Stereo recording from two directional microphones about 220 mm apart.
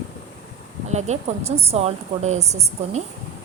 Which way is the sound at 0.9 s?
30° right (ahead or behind).